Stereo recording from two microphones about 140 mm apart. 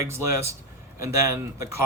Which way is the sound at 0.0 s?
20° right (ahead or behind).